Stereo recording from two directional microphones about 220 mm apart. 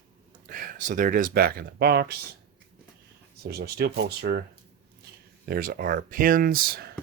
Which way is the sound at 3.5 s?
45° right (ahead or behind).